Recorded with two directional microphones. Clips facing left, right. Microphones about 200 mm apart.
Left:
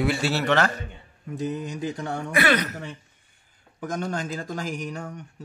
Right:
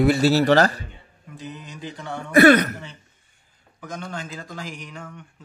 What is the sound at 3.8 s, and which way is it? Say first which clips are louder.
Speech: left 5 dB; 45° left (ahead or behind).